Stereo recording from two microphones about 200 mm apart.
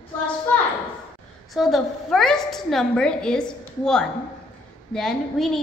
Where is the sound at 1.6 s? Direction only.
Centre (ahead or behind).